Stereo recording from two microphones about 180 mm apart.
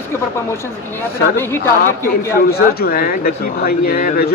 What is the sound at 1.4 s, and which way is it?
Speech, 15° left (ahead or behind).